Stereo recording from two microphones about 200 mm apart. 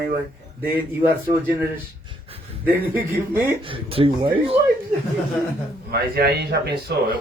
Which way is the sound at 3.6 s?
25° right (ahead or behind).